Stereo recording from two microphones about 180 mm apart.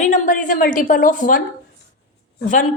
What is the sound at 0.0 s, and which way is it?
A woman's voice, 45° left (ahead or behind).